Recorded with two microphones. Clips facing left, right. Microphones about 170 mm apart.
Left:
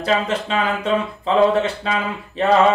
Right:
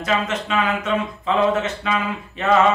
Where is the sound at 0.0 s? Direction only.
30° left (ahead or behind).